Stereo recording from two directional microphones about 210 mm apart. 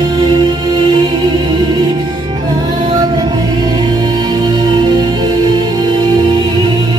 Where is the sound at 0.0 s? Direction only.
20° right (ahead or behind).